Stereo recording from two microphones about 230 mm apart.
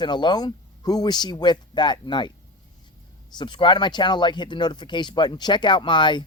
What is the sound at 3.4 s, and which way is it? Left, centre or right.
Speech, centre.